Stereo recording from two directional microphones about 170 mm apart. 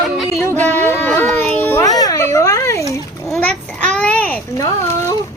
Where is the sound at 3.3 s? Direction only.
5° left (ahead or behind).